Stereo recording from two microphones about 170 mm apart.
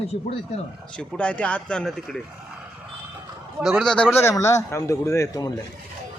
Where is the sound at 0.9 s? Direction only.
5° left (ahead or behind).